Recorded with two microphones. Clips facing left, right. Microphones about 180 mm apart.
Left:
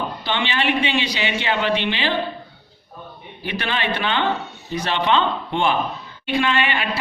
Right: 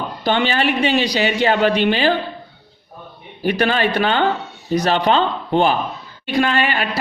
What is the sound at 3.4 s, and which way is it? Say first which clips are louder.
A man's voice: right 8 dB; 40° right (ahead or behind).